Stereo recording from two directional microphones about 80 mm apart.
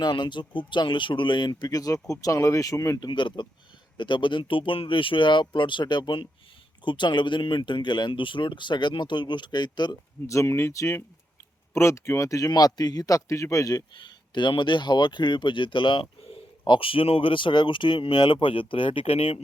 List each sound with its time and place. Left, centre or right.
0.0 s speech: left
1.7 s speech: left
3.0 s speech: left
10.2 s speech: left
12.5 s speech: left
13.9 s speech: left